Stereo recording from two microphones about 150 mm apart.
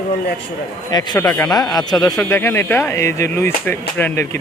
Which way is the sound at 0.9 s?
25° left (ahead or behind).